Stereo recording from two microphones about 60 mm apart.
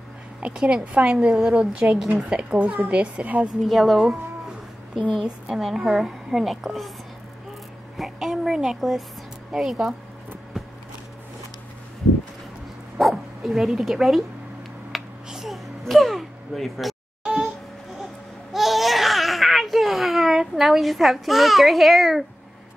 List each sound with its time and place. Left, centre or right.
0.4 s a woman's voice: centre
3.6 s a woman's voice: centre
4.0 s music: centre
5.2 s a woman's voice: centre
8.0 s a sound: centre
9.5 s a woman's voice: centre
12.9 s dog: centre
14.9 s a sound: centre
18.0 s babbling: centre